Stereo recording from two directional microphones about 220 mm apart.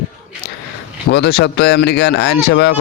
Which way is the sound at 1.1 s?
50° left (ahead or behind).